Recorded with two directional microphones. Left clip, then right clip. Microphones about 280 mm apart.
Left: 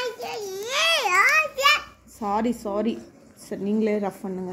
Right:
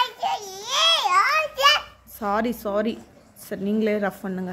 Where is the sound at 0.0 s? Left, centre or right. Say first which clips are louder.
Right 6 dB; centre.